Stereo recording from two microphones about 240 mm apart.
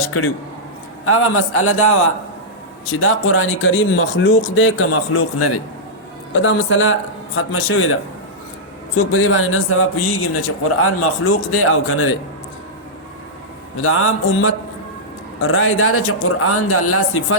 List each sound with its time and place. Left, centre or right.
1.0 s a man's voice: left
6.3 s a man's voice: left
9.1 s a man's voice: left
13.7 s a man's voice: left